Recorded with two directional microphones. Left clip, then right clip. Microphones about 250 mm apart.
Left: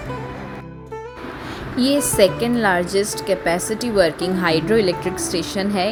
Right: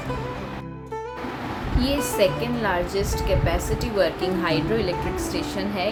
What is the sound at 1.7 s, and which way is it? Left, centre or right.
Speech, left.